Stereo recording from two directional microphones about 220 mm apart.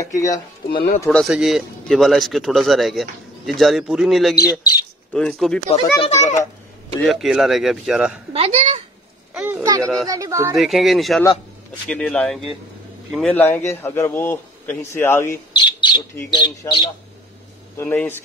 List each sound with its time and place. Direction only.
0.0 s a man's voice: 15° left (ahead or behind)
1.0 s speech: centre (ahead or behind)
5.7 s a child's voice: 25° left (ahead or behind)
7.0 s speech: centre (ahead or behind)
8.3 s a sound: 25° right (ahead or behind)
9.3 s a sound: 10° right (ahead or behind)
10.0 s speech: 15° right (ahead or behind)
10.6 s a man's voice: centre (ahead or behind)
15.5 s bird: 20° left (ahead or behind)
16.2 s speech: 20° left (ahead or behind)
17.7 s a man's voice: 10° left (ahead or behind)